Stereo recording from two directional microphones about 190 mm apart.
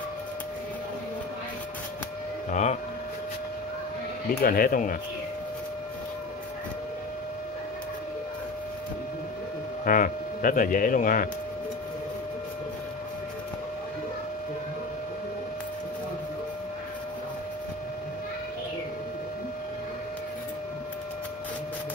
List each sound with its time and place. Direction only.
2.5 s speech: 35° left (ahead or behind)
4.4 s speech: 50° left (ahead or behind)
9.8 s speech: 45° left (ahead or behind)